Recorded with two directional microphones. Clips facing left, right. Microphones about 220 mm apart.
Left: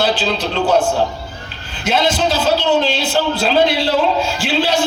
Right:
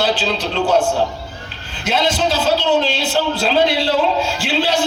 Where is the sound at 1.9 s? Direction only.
45° left (ahead or behind).